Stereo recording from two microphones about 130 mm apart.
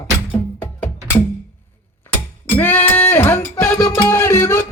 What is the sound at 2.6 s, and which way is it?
Music, 15° left (ahead or behind).